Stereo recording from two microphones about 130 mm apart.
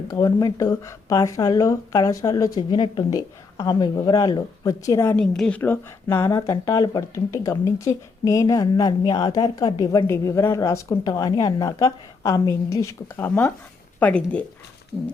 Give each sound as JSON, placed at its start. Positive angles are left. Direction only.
{"t": 0.1, "sound": "speech", "side_deg": 30}
{"t": 2.6, "sound": "speech", "side_deg": 40}
{"t": 5.1, "sound": "speech", "side_deg": 5}
{"t": 10.1, "sound": "speech", "side_deg": 20}
{"t": 13.1, "sound": "speech", "side_deg": 15}